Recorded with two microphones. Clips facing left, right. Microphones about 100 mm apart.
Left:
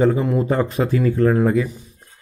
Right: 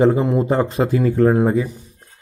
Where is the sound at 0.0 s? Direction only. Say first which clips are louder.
Right 2 dB; 30° right (ahead or behind).